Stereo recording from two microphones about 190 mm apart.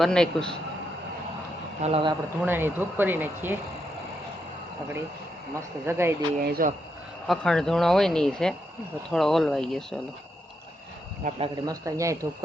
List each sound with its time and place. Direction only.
0.0 s speech: 5° left (ahead or behind)
1.8 s speech: 30° right (ahead or behind)
2.4 s speech: 10° right (ahead or behind)
5.8 s speech: 15° right (ahead or behind)
6.4 s speech: 50° right (ahead or behind)
7.3 s speech: 5° left (ahead or behind)
11.2 s speech: 40° right (ahead or behind)
11.5 s speech: 20° right (ahead or behind)